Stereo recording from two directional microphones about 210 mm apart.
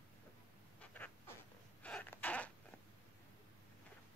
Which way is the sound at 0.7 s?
10° left (ahead or behind).